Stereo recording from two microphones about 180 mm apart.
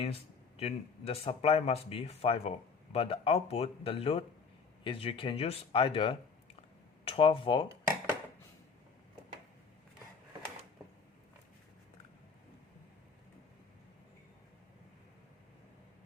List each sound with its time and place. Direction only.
0.0 s speech: 35° left (ahead or behind)